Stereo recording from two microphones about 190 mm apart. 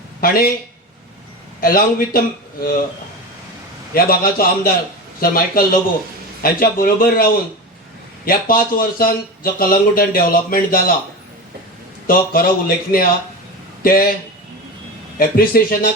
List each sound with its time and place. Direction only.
0.2 s speech: 50° left (ahead or behind)
1.6 s speech: 50° left (ahead or behind)
3.9 s speech: 50° left (ahead or behind)
12.0 s speech: 50° left (ahead or behind)
15.2 s speech: 50° left (ahead or behind)